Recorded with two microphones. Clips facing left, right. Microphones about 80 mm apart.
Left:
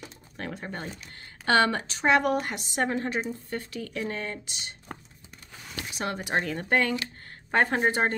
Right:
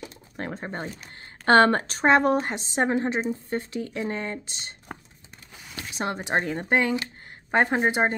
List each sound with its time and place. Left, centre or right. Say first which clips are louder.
0.4 s a woman's voice: right 3 dB; right
5.9 s a woman's voice: right 3 dB; right